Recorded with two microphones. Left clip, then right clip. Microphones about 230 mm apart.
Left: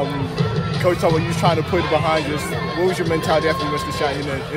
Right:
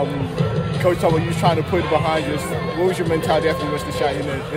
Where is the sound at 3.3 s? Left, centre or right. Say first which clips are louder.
Left 1 dB; right.